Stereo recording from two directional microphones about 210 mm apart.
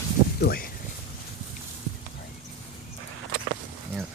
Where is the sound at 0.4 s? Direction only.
45° left (ahead or behind).